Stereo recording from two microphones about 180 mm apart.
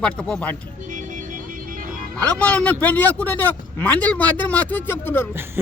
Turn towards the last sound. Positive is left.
turn(degrees=10)  # may be behind; listen again after turning